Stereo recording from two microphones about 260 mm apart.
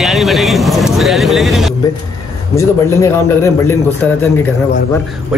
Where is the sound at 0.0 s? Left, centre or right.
Centre.